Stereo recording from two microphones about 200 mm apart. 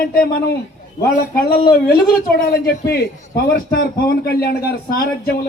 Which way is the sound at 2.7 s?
55° left (ahead or behind).